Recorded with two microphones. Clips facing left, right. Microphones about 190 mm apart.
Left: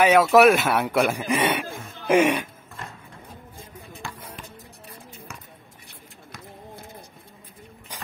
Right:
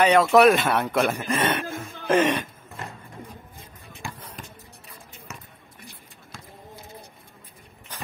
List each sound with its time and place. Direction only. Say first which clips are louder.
0.0 s a man's voice: left 1 dB; 5° left (ahead or behind)
4.4 s music: even; 40° right (ahead or behind)
7.9 s a sound: right 1 dB; 15° left (ahead or behind)